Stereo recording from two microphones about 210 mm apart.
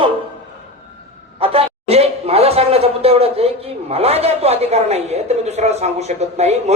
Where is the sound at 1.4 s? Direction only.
30° right (ahead or behind).